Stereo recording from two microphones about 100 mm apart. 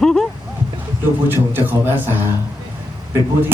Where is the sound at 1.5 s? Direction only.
20° right (ahead or behind).